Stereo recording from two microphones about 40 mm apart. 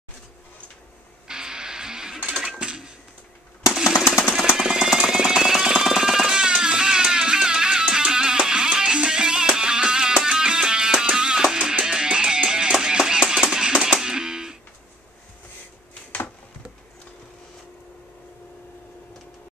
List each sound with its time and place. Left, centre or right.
1.2 s music: centre
2.6 s dishes: right
3.7 s jackhammer: centre
4.5 s music: centre